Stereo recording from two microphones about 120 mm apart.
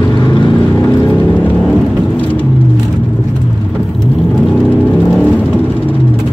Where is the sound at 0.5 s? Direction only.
10° left (ahead or behind).